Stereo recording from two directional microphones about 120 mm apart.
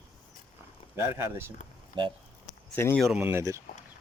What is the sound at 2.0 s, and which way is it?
Speech, 40° right (ahead or behind).